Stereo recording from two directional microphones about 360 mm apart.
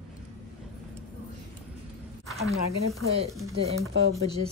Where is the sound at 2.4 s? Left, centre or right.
Centre.